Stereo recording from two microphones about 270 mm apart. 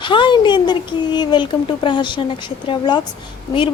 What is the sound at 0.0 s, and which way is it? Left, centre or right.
Speech, centre.